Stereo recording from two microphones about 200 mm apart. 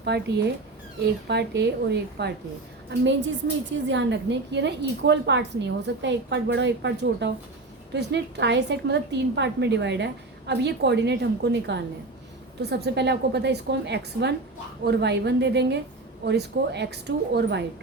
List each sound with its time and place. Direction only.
0.0 s a woman's voice: 55° right (ahead or behind)